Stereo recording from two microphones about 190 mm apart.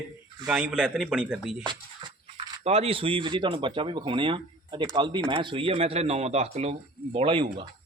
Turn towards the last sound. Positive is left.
turn(degrees=-25)  # may be behind; listen again after turning